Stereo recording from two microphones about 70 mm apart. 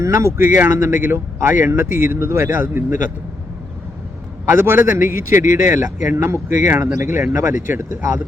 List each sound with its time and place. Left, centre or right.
0.0 s speech: right
2.5 s speech: right
4.4 s speech: right